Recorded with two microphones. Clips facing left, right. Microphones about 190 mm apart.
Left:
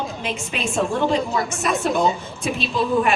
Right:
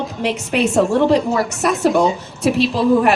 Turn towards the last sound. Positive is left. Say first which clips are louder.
# right 6 dB
turn(degrees=-70)  # may be behind; listen again after turning